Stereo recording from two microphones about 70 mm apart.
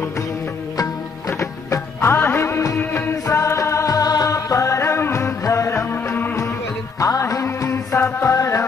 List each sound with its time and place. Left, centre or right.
1.4 s music: left
2.1 s music of bollywood: left
2.8 s music: left
3.3 s music: left
7.0 s music: left
8.0 s music: left